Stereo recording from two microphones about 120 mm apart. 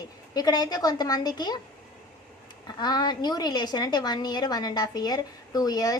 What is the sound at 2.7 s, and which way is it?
A woman's voice, 35° left (ahead or behind).